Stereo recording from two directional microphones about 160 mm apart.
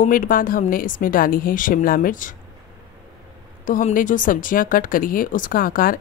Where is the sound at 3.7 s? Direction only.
55° left (ahead or behind).